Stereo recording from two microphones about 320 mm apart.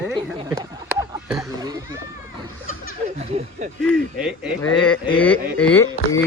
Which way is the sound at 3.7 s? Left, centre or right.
Centre.